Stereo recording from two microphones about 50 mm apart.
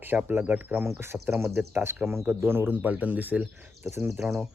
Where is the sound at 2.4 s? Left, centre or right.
Right.